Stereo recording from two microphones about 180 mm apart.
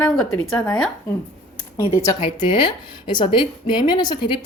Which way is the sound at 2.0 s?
25° left (ahead or behind).